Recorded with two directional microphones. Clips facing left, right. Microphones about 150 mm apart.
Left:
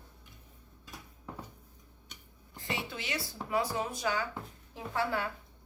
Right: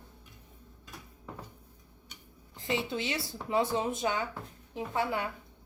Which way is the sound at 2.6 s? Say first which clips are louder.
Right 6 dB; 20° right (ahead or behind).